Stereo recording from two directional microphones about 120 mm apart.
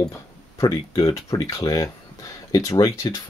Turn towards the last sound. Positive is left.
turn(degrees=30)  # may be behind; listen again after turning